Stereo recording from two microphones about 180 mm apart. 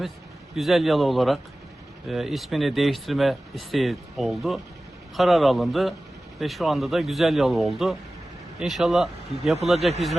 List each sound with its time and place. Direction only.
0.5 s speech: centre (ahead or behind)